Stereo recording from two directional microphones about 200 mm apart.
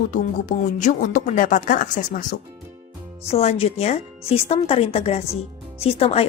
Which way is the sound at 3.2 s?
30° left (ahead or behind).